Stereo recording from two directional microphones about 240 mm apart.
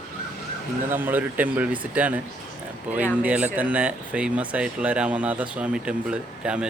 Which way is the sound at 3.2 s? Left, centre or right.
Centre.